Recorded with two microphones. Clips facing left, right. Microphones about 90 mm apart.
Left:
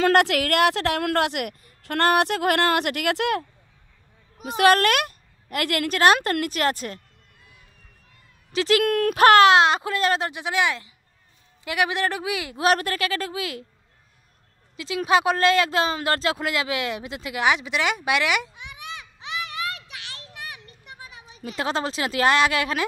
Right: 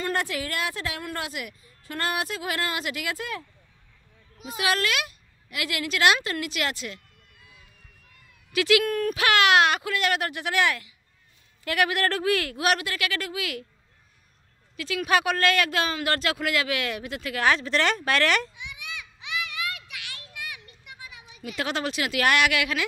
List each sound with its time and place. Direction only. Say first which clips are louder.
0.0 s speech: left 9 dB; 80° left
4.5 s a woman's voice: left 9 dB; 55° left (ahead or behind)
8.5 s speech: left 1 dB; 35° left (ahead or behind)
8.8 s speech: left 4 dB; 70° left (ahead or behind)
9.1 s speech: left 10 dB; 40° left (ahead or behind)
9.5 s speech: left 3 dB; 30° left (ahead or behind)
12.5 s a woman's voice: left 4 dB; 35° left (ahead or behind)
14.8 s speech: left 3 dB; 25° left (ahead or behind)
18.5 s children playing: left 2 dB; 45° left (ahead or behind)